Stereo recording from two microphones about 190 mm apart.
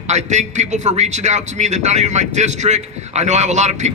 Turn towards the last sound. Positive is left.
turn(degrees=-35)  # may be behind; listen again after turning